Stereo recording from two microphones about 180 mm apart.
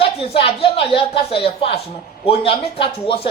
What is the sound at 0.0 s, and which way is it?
A man's voice, 30° left (ahead or behind).